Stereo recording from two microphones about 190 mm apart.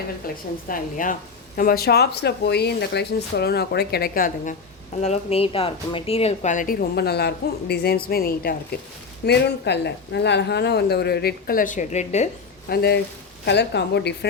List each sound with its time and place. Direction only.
0.3 s a woman's voice: 50° left (ahead or behind)
4.9 s a woman's voice: 35° left (ahead or behind)
12.6 s speech: 55° left (ahead or behind)